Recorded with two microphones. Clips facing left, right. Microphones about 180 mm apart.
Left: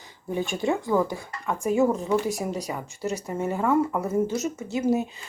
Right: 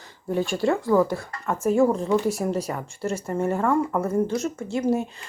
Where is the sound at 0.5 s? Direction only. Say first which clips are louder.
Right 2 dB; 20° left (ahead or behind).